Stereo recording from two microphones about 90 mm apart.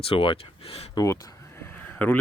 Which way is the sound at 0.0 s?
85° left.